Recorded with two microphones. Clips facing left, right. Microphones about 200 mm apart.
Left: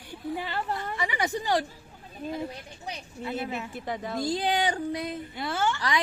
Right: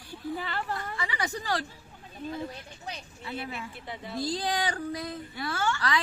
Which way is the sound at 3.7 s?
45° left (ahead or behind).